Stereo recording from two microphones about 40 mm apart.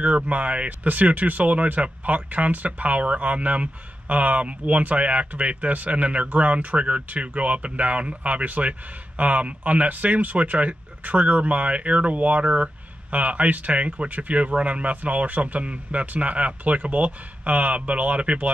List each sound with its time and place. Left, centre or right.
0.0 s speech: right